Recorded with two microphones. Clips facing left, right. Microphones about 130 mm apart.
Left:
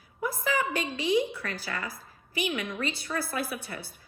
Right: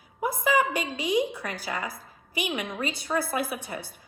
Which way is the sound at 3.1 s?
45° right (ahead or behind).